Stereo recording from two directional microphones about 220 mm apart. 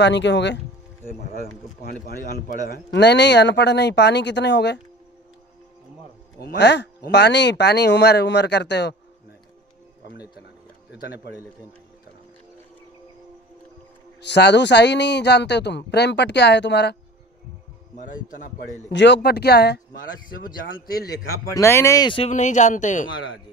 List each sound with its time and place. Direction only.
0.0 s speech: 55° left (ahead or behind)
2.0 s speech: 45° left (ahead or behind)
6.4 s speech: 50° left (ahead or behind)
14.2 s speech: 50° left (ahead or behind)
18.9 s speech: 55° left (ahead or behind)
21.5 s speech: 15° left (ahead or behind)
22.3 s speech: 35° left (ahead or behind)